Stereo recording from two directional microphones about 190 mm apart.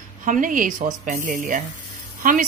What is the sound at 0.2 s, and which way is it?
A woman's voice, 45° right (ahead or behind).